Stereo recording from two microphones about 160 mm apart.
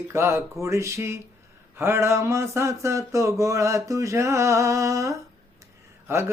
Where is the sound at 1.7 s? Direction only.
15° right (ahead or behind).